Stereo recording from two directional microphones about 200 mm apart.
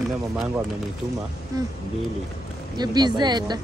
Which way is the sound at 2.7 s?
20° right (ahead or behind).